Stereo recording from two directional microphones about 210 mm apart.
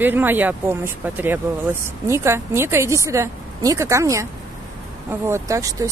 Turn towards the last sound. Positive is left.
turn(degrees=-15)  # may be behind; listen again after turning